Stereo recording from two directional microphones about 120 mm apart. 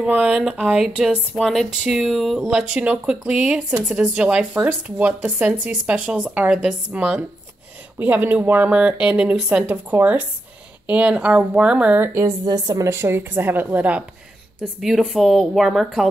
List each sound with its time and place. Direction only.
0.0 s speech: 5° right (ahead or behind)
12.1 s a woman's voice: 25° right (ahead or behind); by 16.1 s centre (ahead or behind)